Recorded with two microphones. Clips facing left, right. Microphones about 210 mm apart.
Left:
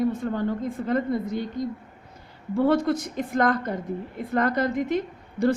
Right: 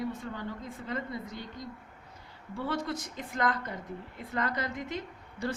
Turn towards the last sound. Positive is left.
turn(degrees=60)  # may be behind; listen again after turning